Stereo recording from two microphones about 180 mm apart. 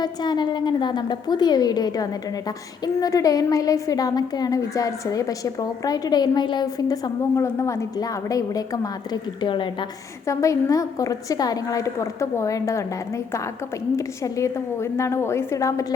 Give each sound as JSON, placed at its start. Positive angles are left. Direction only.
{"t": 0.0, "sound": "a woman's voice", "side_deg": 25}